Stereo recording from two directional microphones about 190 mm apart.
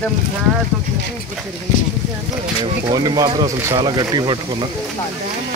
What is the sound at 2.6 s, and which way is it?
Speech, 25° right (ahead or behind).